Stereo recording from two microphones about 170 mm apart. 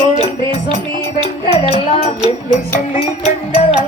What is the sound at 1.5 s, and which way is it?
Music, 40° left (ahead or behind).